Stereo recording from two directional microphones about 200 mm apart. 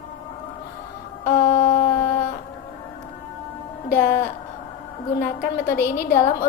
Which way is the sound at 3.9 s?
45° left (ahead or behind).